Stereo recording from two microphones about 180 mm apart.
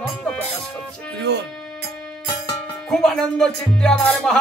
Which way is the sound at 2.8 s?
5° left (ahead or behind).